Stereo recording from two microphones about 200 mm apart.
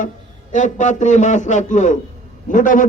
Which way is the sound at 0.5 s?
40° left (ahead or behind).